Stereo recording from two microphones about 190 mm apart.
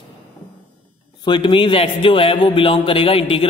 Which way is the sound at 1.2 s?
25° left (ahead or behind).